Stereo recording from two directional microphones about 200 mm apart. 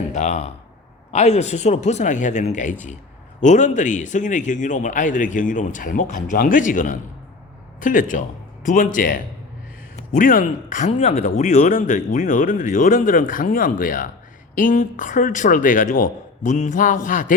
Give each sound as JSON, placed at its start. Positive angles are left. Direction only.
{"t": 0.1, "sound": "speech", "side_deg": 35}